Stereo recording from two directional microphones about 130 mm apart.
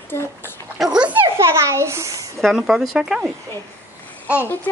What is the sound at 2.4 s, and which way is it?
Speech, 5° right (ahead or behind).